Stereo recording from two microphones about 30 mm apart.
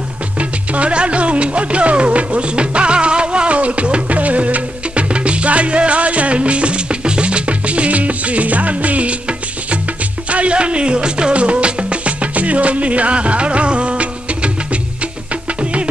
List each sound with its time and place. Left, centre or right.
0.4 s music: right
5.1 s music: right
10.3 s music: right
11.3 s music: right